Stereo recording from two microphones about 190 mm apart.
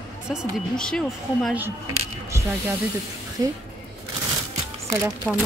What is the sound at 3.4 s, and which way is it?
Speech, 20° right (ahead or behind).